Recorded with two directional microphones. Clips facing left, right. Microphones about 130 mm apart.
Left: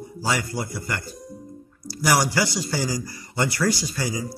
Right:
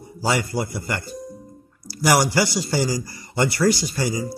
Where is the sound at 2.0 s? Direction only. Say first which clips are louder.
Right 3 dB; 20° right (ahead or behind).